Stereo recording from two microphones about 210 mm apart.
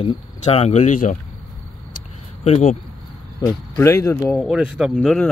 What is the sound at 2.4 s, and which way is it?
Speech, 30° left (ahead or behind).